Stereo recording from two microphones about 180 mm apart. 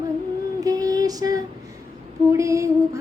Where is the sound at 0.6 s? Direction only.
20° right (ahead or behind).